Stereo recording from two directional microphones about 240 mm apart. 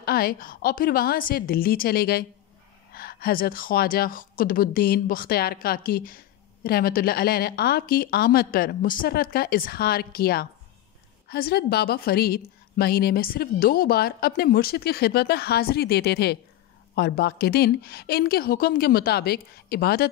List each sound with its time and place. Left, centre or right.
0.0 s a woman's voice: left